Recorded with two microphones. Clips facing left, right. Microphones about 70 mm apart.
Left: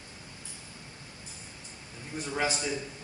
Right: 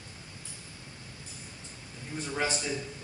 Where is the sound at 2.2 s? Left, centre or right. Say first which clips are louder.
Left 1 dB; centre.